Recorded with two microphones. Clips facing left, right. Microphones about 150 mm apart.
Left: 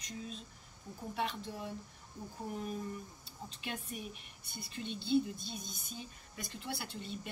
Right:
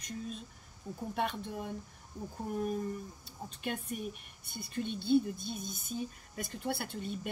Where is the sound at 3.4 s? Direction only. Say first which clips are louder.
Right 5 dB; 50° right (ahead or behind).